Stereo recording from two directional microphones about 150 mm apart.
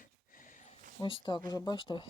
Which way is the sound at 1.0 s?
35° left (ahead or behind).